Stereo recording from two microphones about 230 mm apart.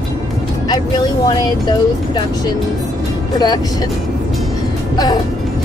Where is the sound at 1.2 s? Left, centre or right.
Centre.